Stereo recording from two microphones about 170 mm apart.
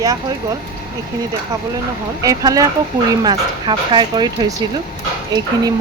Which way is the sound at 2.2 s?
20° right (ahead or behind).